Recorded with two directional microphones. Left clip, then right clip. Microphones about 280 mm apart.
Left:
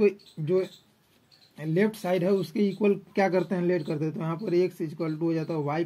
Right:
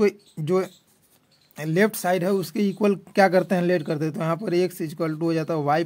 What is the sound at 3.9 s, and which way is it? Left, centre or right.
Speech, right.